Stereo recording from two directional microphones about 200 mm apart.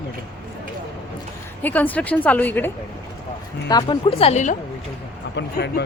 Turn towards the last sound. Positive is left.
turn(degrees=55)  # may be behind; listen again after turning